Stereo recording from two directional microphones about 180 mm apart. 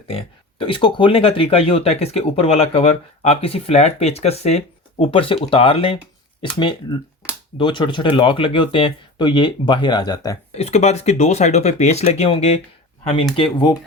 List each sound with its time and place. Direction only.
0.1 s speech: 30° left (ahead or behind)
10.5 s speech: 35° left (ahead or behind)